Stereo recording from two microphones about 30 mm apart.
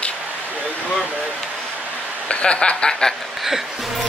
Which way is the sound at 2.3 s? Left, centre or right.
Left.